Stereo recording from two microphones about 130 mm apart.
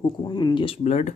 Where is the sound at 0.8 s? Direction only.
60° left (ahead or behind).